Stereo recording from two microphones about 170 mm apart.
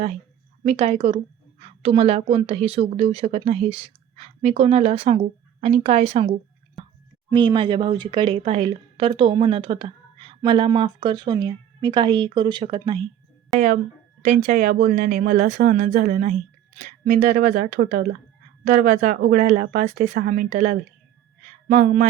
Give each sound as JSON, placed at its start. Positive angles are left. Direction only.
{"t": 0.6, "sound": "a woman's voice", "side_deg": -40}
{"t": 7.3, "sound": "a woman's voice", "side_deg": -30}
{"t": 14.2, "sound": "speech", "side_deg": -50}